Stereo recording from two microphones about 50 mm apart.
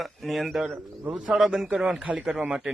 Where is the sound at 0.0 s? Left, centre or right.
Centre.